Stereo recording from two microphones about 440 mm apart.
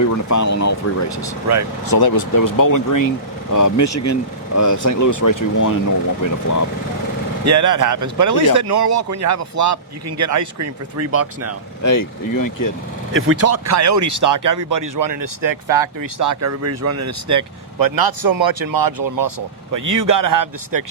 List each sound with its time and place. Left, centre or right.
0.0 s speech: left
1.9 s speech: left
7.4 s speech: right
11.8 s speech: left
13.1 s speech: right